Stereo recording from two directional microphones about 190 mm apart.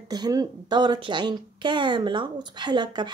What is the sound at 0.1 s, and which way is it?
A woman's voice, 20° right (ahead or behind).